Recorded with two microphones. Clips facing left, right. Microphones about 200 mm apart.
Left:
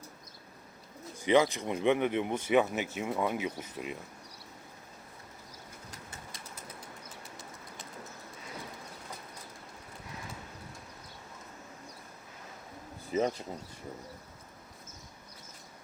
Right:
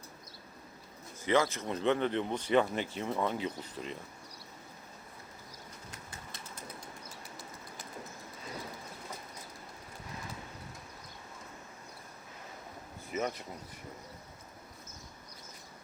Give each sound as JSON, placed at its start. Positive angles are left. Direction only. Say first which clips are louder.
{"t": 1.2, "sound": "speech", "louder": "left 3 dB", "side_deg": 15}
{"t": 13.1, "sound": "speech", "louder": "left 5 dB", "side_deg": 30}